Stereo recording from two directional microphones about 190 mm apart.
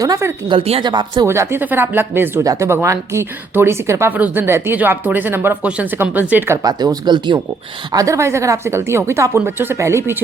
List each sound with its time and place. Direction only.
0.0 s speech: 15° right (ahead or behind)
0.5 s speech: 30° right (ahead or behind)